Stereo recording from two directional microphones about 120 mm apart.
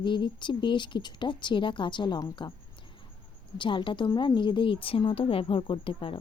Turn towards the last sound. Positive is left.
turn(degrees=45)  # may be behind; listen again after turning